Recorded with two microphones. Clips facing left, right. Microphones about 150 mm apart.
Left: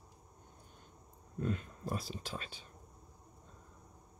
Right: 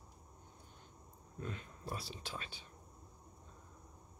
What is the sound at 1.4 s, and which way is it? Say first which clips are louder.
Speech: left 8 dB; 45° left (ahead or behind).